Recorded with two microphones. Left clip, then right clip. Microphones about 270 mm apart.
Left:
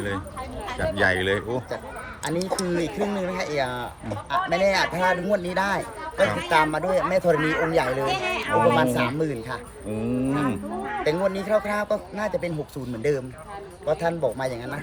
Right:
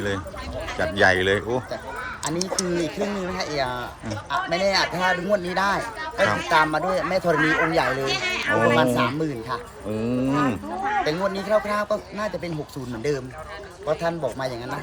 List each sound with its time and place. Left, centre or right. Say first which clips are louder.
0.8 s a man's voice: right 3 dB; centre
8.0 s speech: right 1 dB; left
8.7 s a man's voice: right 2 dB; centre